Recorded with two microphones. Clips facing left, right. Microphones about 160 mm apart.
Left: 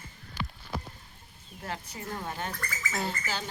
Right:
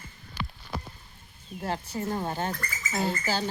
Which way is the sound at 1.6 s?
30° right (ahead or behind).